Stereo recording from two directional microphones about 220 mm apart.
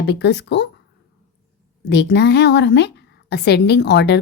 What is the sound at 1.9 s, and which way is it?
A woman's voice, 50° left (ahead or behind).